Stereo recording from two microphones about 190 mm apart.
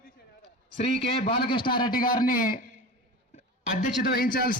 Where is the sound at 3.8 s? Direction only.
50° left (ahead or behind).